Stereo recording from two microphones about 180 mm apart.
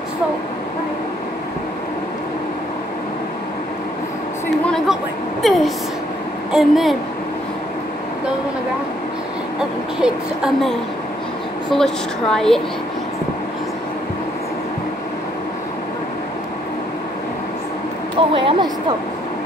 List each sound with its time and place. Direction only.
4.6 s a sound: 5° left (ahead or behind)
5.4 s a woman's voice: centre (ahead or behind)
9.6 s speech: 5° right (ahead or behind)
18.3 s a woman's voice: 30° right (ahead or behind)